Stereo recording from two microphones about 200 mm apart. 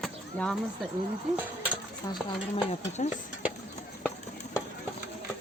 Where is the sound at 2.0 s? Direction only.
20° left (ahead or behind).